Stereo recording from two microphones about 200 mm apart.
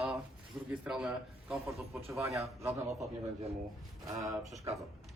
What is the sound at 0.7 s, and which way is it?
A man's voice, 5° right (ahead or behind).